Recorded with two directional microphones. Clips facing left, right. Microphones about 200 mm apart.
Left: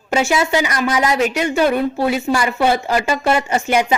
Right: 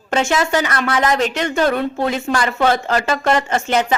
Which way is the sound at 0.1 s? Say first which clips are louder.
Left 1 dB; 10° left (ahead or behind).